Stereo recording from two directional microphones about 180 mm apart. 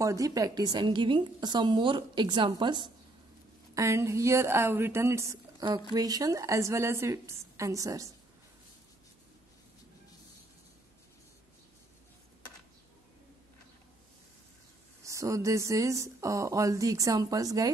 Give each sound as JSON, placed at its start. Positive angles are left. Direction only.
{"t": 0.0, "sound": "a woman's voice", "side_deg": -20}
{"t": 15.0, "sound": "speech", "side_deg": -15}